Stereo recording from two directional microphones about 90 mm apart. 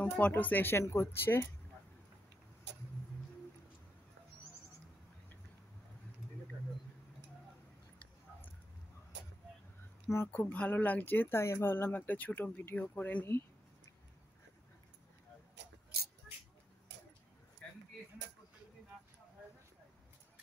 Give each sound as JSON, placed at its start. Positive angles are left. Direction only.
{"t": 0.0, "sound": "speech", "side_deg": 20}
{"t": 10.0, "sound": "speech", "side_deg": 25}
{"t": 17.6, "sound": "a sound", "side_deg": 10}